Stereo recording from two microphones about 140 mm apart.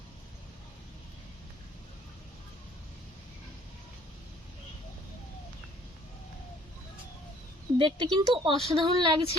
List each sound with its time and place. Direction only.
7.8 s a woman's voice: 35° right (ahead or behind)